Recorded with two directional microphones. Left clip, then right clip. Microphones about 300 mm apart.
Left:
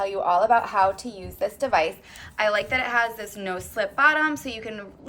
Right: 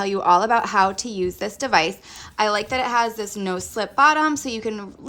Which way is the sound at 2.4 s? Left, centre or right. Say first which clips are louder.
Right 2 dB; centre.